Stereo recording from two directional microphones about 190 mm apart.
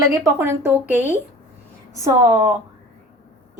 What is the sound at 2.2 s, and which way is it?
Speech, 25° right (ahead or behind).